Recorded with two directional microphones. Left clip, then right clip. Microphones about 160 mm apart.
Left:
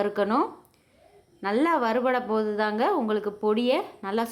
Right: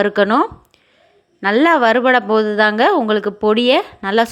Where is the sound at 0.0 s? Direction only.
25° right (ahead or behind).